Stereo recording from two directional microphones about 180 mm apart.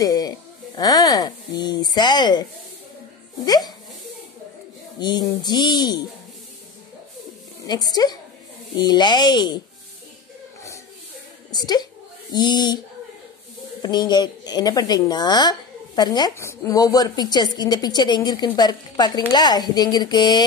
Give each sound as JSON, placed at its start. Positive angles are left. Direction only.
{"t": 0.0, "sound": "a sound", "side_deg": 20}
{"t": 0.7, "sound": "speech", "side_deg": 20}
{"t": 3.4, "sound": "a woman's voice", "side_deg": 20}
{"t": 4.9, "sound": "a woman's voice", "side_deg": 25}
{"t": 7.6, "sound": "a woman's voice", "side_deg": 20}
{"t": 11.5, "sound": "a woman's voice", "side_deg": 20}
{"t": 13.8, "sound": "a woman's voice", "side_deg": 25}